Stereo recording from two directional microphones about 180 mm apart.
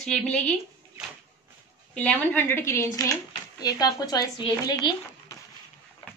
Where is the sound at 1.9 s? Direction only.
10° left (ahead or behind).